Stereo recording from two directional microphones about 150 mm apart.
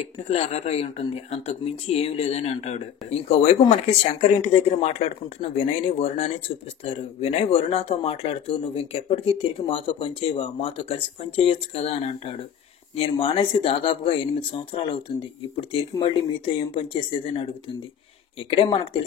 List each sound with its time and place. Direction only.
0.0 s speech: 45° left (ahead or behind)
18.5 s speech: 35° left (ahead or behind)